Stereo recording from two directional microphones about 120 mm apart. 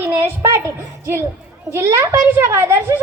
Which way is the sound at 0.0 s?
20° right (ahead or behind).